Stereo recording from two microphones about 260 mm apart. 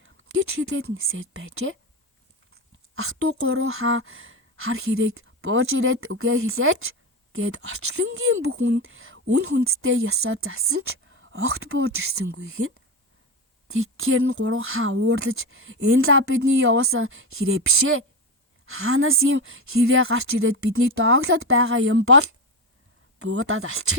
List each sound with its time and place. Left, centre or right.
0.0 s a sound: right
1.1 s speech: right
2.9 s speech: right